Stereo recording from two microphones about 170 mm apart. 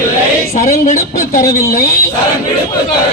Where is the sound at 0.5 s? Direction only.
45° left (ahead or behind).